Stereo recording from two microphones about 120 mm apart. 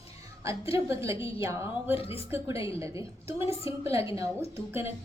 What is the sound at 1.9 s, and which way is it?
Speech, 50° left (ahead or behind).